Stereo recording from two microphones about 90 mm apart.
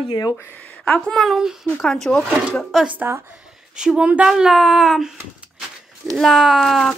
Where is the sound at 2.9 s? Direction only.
30° right (ahead or behind).